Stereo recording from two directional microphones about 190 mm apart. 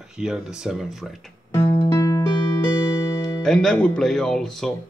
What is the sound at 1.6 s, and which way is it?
Music, 30° left (ahead or behind).